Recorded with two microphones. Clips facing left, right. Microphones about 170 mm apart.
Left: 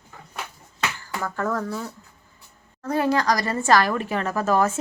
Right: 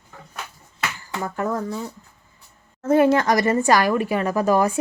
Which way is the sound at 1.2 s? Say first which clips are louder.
Right 1 dB; 20° right (ahead or behind).